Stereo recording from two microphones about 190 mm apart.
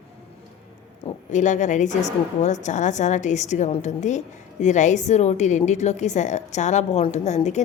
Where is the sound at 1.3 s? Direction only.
40° left (ahead or behind).